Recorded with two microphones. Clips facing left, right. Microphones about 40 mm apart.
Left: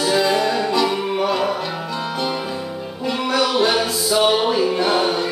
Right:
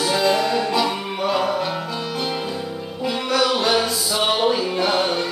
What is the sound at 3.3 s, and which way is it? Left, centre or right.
Music, centre.